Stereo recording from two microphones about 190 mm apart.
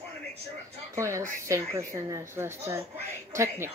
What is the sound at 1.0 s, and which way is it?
Speech, 15° right (ahead or behind).